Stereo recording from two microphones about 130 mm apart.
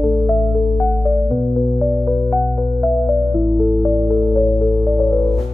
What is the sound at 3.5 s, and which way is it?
Music, centre (ahead or behind).